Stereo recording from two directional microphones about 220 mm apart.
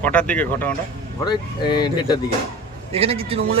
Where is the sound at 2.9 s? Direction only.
25° right (ahead or behind).